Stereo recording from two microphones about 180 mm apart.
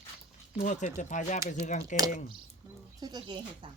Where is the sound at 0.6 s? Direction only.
40° left (ahead or behind).